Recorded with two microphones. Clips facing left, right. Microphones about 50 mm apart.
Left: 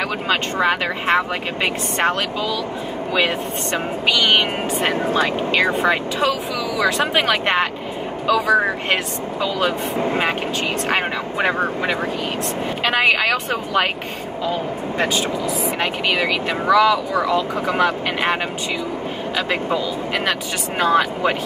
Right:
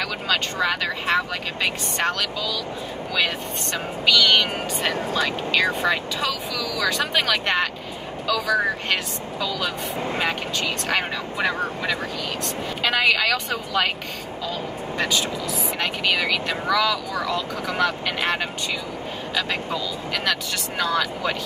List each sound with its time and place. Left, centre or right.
0.3 s speech: left